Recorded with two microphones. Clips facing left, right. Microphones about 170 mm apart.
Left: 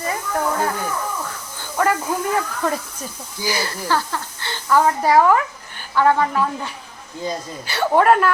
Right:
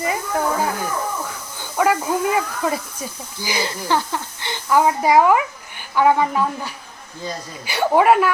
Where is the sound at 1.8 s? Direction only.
10° right (ahead or behind).